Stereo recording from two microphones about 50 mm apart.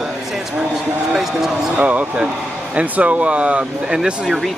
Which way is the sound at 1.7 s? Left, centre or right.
Right.